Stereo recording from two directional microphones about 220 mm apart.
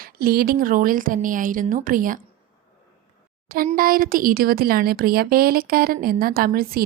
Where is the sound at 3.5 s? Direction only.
40° right (ahead or behind).